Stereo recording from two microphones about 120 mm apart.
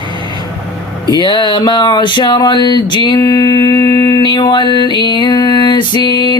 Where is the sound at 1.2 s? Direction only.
40° left (ahead or behind).